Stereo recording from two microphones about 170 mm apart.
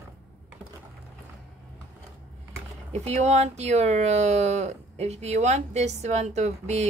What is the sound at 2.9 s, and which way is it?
Speech, 40° right (ahead or behind).